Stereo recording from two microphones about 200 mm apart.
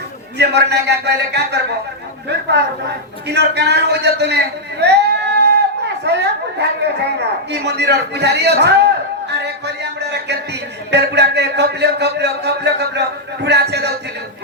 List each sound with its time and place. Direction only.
0.3 s speech: 55° right (ahead or behind)
3.2 s speech: 55° right (ahead or behind)
4.8 s a sound: 55° right (ahead or behind)
7.2 s speech: 55° right (ahead or behind)